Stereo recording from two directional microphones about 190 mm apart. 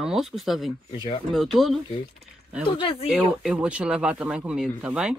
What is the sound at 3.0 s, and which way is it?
Speech, 5° right (ahead or behind).